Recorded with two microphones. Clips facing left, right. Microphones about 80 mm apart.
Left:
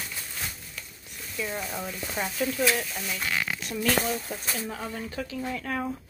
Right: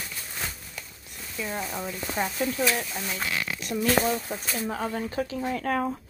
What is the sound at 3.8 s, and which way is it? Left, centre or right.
Speech, right.